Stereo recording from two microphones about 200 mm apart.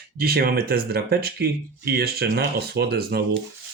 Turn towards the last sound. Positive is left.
turn(degrees=-55)  # may be behind; listen again after turning